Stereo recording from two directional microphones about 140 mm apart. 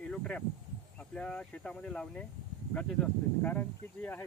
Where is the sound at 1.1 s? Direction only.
10° left (ahead or behind).